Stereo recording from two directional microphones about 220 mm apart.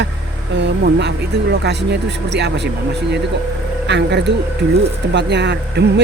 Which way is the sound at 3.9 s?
50° right (ahead or behind).